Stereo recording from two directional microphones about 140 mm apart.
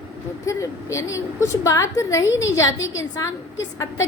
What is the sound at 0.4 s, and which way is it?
A woman's voice, 20° left (ahead or behind).